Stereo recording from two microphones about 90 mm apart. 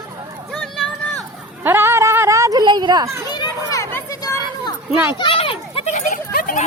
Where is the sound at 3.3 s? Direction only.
50° left (ahead or behind).